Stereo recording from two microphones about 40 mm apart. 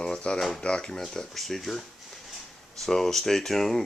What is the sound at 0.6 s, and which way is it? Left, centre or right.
Speech, left.